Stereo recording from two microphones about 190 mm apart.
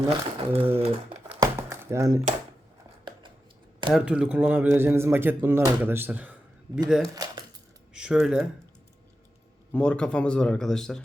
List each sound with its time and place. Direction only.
0.0 s speech: 30° right (ahead or behind)
0.8 s crumpling: 30° right (ahead or behind)
1.4 s a sound: 15° right (ahead or behind)
3.9 s speech: 5° right (ahead or behind)
7.1 s a sound: 20° right (ahead or behind)
7.9 s speech: 5° right (ahead or behind)
9.7 s speech: 5° left (ahead or behind)